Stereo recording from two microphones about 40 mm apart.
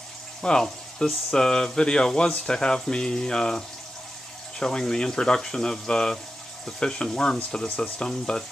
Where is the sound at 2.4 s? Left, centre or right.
Centre.